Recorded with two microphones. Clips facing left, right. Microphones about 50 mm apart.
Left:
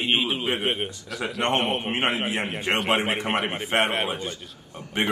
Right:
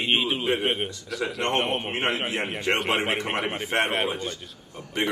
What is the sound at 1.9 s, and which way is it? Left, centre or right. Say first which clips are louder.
Speech: left 1 dB; left.